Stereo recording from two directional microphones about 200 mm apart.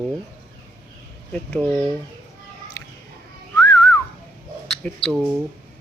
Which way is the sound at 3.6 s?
15° left (ahead or behind).